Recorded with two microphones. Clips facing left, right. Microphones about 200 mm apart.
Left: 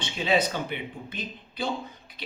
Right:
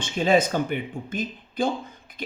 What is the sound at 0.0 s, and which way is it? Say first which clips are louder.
A man's voice: right 5 dB; 45° right (ahead or behind).